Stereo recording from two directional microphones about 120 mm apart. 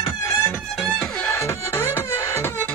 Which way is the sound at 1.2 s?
25° left (ahead or behind).